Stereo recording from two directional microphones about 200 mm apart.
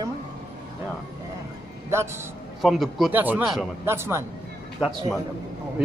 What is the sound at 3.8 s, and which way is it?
Speech, 10° right (ahead or behind).